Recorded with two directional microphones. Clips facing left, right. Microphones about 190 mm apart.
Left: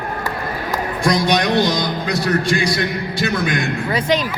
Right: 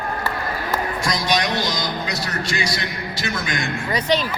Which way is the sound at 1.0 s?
55° left (ahead or behind).